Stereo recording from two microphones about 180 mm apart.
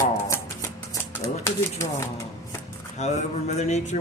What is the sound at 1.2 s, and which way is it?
Speech, 15° left (ahead or behind).